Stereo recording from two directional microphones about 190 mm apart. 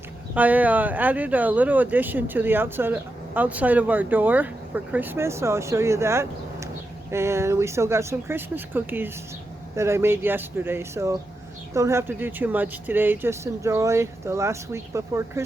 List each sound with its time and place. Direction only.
0.3 s speech: 10° right (ahead or behind)